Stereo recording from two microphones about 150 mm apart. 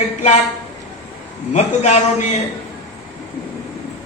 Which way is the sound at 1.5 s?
45° left (ahead or behind).